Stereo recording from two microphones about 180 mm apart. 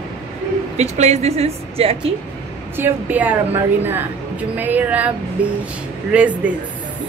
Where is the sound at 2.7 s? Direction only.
10° right (ahead or behind).